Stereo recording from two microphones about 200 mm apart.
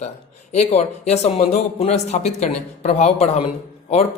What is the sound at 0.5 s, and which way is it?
Speech, 35° left (ahead or behind).